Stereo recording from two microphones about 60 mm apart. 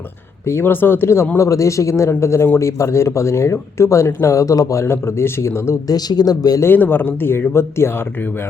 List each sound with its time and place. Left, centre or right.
0.4 s speech: left
1.4 s speech: left
4.3 s speech: left
4.9 s a man's voice: left
5.9 s a man's voice: left
6.7 s a man's voice: left